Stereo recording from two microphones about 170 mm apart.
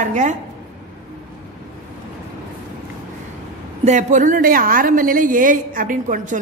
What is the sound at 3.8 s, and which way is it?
A woman's voice, 45° right (ahead or behind).